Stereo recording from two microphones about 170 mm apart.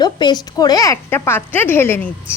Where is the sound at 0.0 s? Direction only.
25° left (ahead or behind).